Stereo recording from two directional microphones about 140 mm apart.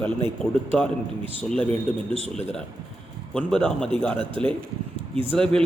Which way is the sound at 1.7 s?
45° right (ahead or behind).